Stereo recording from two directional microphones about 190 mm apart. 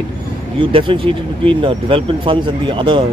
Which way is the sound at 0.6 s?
25° right (ahead or behind).